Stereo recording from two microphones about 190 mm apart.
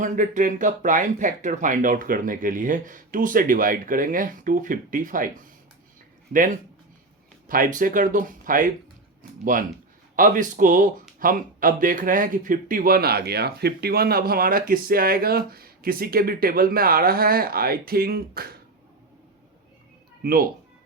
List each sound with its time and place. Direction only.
0.0 s speech: 40° right (ahead or behind)
6.3 s speech: 45° right (ahead or behind)
20.2 s speech: 50° right (ahead or behind)